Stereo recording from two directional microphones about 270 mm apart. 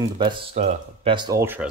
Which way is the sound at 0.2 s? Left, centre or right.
Centre.